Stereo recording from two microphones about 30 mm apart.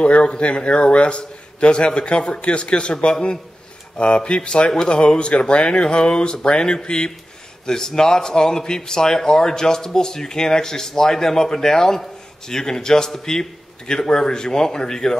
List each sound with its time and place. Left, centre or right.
0.0 s a man's voice: left; by 15.1 s centre